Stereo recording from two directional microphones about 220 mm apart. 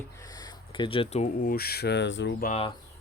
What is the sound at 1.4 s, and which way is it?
Speech, 45° left (ahead or behind).